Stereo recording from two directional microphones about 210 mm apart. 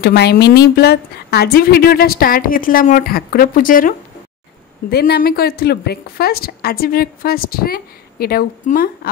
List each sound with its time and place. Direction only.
0.0 s a woman's voice: 45° left (ahead or behind)
4.9 s a woman's voice: 50° left (ahead or behind)